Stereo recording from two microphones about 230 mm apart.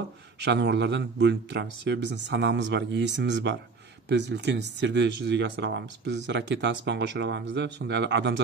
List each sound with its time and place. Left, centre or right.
0.4 s speech: right